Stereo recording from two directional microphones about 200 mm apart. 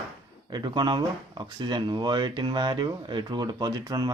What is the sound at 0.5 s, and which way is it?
Speech, 20° right (ahead or behind).